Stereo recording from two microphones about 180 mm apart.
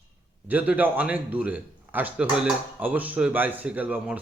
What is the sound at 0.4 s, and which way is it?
Speech, 10° right (ahead or behind).